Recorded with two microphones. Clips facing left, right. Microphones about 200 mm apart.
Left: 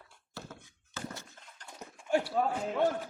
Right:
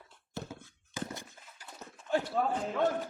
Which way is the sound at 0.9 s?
15° right (ahead or behind).